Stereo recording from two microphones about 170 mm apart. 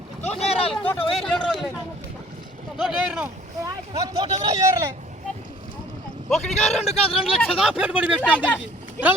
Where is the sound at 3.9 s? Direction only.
20° right (ahead or behind).